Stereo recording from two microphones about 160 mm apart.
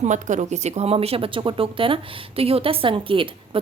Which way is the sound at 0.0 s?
50° right (ahead or behind).